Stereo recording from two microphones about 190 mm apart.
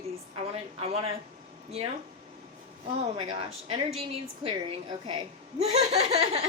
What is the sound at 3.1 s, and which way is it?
A woman's voice, 25° right (ahead or behind).